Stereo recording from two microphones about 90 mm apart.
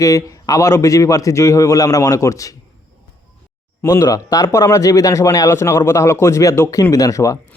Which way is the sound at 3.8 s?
40° left (ahead or behind).